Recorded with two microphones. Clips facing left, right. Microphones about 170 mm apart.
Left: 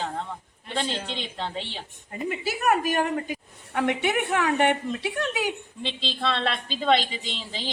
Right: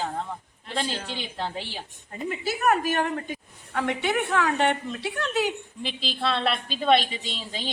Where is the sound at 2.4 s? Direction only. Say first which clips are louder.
Right 1 dB; 10° left (ahead or behind).